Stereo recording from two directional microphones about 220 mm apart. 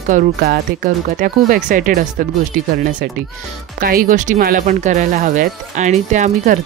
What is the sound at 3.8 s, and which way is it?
Speech, 40° right (ahead or behind).